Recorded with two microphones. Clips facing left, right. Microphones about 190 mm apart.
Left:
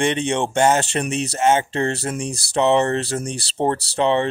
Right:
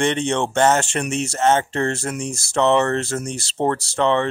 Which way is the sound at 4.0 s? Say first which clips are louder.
Even; 15° left (ahead or behind).